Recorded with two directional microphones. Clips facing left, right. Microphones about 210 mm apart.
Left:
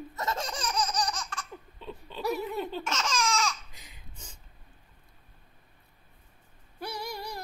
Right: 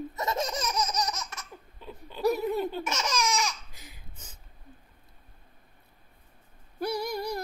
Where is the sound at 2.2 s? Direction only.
40° right (ahead or behind).